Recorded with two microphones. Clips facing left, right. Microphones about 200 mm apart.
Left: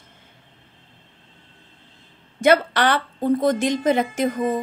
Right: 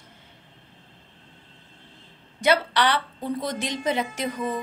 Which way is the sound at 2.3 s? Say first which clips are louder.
Left 5 dB; 50° left (ahead or behind).